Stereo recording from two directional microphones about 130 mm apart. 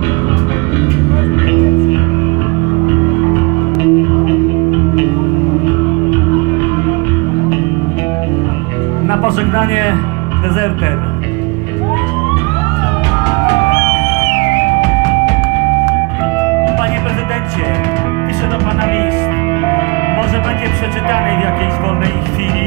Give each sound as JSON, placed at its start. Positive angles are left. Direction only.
{"t": 3.8, "sound": "music", "side_deg": 25}
{"t": 9.1, "sound": "music", "side_deg": 25}
{"t": 14.8, "sound": "music", "side_deg": 25}
{"t": 16.3, "sound": "music", "side_deg": 20}